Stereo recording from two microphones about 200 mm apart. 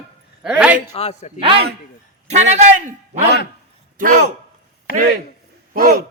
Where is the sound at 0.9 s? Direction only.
30° left (ahead or behind).